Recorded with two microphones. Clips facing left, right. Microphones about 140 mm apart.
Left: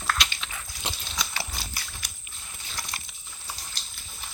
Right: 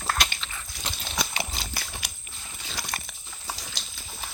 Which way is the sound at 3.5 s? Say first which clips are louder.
Right 4 dB; 90° right.